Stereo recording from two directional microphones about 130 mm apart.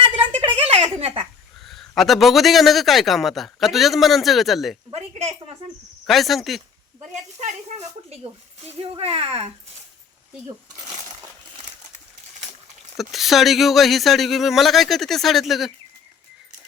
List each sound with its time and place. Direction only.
0.0 s a sound: 45° right (ahead or behind)
1.6 s a man's voice: centre (ahead or behind)
4.9 s speech: 55° right (ahead or behind)
6.1 s a man's voice: centre (ahead or behind)
8.2 s speech: 50° right (ahead or behind)
13.0 s a man's voice: centre (ahead or behind)